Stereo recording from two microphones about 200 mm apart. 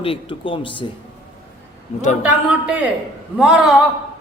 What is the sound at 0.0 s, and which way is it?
Speech, 25° left (ahead or behind).